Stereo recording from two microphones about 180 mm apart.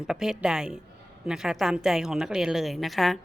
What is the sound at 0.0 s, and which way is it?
A woman's voice, 5° right (ahead or behind).